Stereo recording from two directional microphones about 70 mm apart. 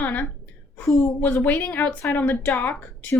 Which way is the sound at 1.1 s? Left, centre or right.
Left.